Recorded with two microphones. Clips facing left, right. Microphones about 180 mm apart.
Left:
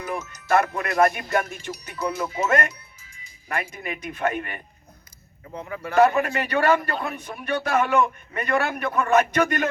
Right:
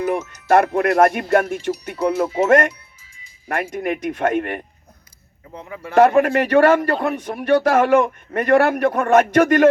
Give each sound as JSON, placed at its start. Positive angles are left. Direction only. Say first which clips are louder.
{"t": 0.0, "sound": "speech", "louder": "right 9 dB", "side_deg": -75}
{"t": 1.8, "sound": "speech", "louder": "right 5 dB", "side_deg": -60}
{"t": 2.1, "sound": "speech", "louder": "right 7 dB", "side_deg": -30}
{"t": 2.5, "sound": "speech", "louder": "right 8 dB", "side_deg": -80}
{"t": 5.6, "sound": "speech", "louder": "right 3 dB", "side_deg": -25}
{"t": 6.0, "sound": "a man's voice", "louder": "right 6 dB", "side_deg": -80}